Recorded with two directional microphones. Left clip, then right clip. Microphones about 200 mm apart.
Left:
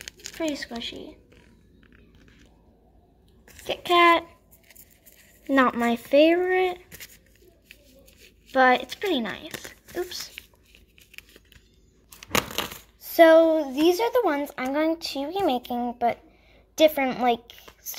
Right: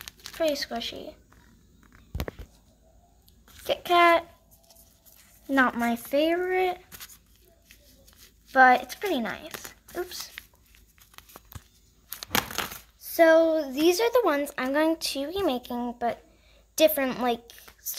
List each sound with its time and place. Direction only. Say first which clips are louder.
0.0 s speech: right 3 dB; 5° left (ahead or behind)
3.6 s speech: left 2 dB; centre (ahead or behind)
5.5 s speech: left 2 dB; centre (ahead or behind)
8.5 s speech: right 1 dB; 5° left (ahead or behind)
12.5 s a woman's voice: left 2 dB; 5° left (ahead or behind)